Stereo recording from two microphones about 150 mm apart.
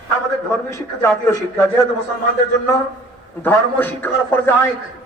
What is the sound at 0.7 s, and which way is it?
A man's voice, 20° left (ahead or behind).